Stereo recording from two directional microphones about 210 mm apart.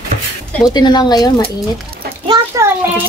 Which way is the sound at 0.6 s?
20° left (ahead or behind).